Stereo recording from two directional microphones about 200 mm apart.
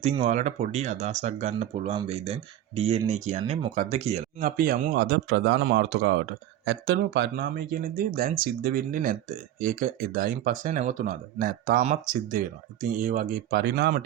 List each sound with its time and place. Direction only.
0.0 s speech: 35° right (ahead or behind)
4.4 s speech: 45° right (ahead or behind)